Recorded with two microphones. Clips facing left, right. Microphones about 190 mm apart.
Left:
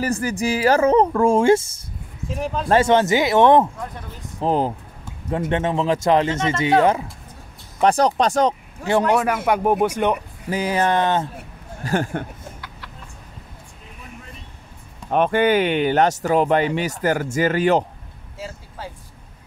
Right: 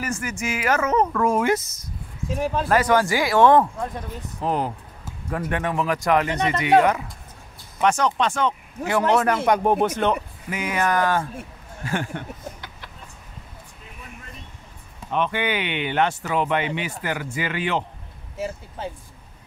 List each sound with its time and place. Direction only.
0.0 s speech: 35° left (ahead or behind)
2.2 s speech: centre (ahead or behind)
2.7 s speech: 25° left (ahead or behind)
4.4 s speech: 30° left (ahead or behind)
9.1 s speech: 10° left (ahead or behind)
10.5 s speech: 35° left (ahead or behind)
11.8 s speech: 40° left (ahead or behind)
15.0 s speech: 45° left (ahead or behind)
18.8 s speech: 20° right (ahead or behind)